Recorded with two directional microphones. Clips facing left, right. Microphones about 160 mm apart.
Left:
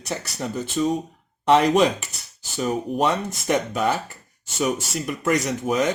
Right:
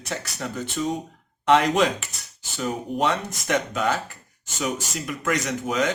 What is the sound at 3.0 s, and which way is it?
Speech, 15° left (ahead or behind).